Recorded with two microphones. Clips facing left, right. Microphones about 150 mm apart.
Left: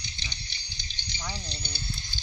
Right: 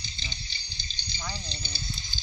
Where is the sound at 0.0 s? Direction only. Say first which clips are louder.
Even; 70° left (ahead or behind).